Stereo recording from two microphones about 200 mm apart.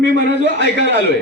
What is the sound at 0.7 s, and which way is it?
Speech, 55° right (ahead or behind).